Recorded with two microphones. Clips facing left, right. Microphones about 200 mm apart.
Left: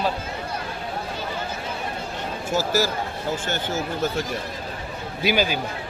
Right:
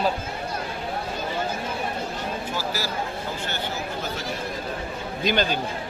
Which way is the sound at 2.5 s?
45° left (ahead or behind).